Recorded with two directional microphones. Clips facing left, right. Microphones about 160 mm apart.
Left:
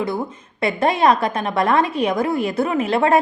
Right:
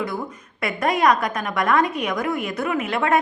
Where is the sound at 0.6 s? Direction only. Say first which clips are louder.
Left 3 dB; 30° left (ahead or behind).